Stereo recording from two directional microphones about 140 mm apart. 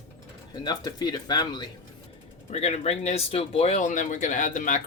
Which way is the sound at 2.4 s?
50° left (ahead or behind).